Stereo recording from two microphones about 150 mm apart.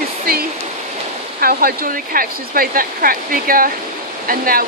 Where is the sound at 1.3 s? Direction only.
75° right (ahead or behind).